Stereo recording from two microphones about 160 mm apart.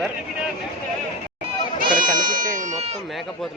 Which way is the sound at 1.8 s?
60° right (ahead or behind).